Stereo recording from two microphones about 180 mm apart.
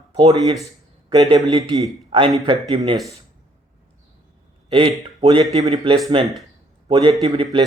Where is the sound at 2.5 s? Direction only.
30° right (ahead or behind).